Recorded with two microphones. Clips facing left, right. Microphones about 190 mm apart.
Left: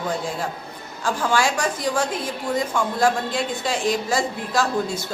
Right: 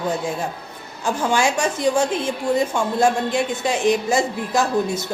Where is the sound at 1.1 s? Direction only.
20° right (ahead or behind).